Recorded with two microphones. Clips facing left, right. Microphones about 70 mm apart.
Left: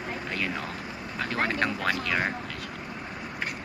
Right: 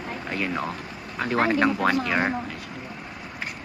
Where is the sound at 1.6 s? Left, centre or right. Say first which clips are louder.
Right 6 dB; centre.